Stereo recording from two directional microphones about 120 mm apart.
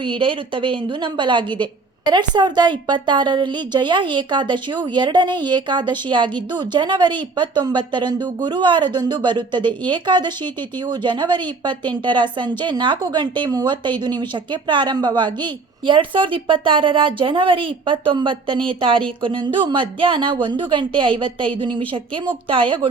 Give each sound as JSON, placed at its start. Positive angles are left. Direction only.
{"t": 0.0, "sound": "a woman's voice", "side_deg": -45}